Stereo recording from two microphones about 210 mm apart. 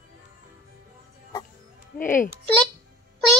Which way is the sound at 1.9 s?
10° left (ahead or behind).